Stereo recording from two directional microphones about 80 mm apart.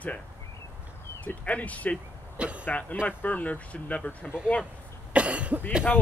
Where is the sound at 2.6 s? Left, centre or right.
Centre.